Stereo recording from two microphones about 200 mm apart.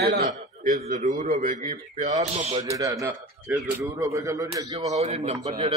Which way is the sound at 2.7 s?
15° right (ahead or behind).